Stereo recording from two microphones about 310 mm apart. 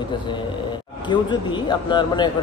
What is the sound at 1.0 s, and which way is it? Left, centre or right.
Speech, centre.